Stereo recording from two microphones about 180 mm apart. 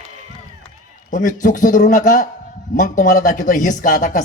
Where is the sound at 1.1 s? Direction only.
45° left (ahead or behind).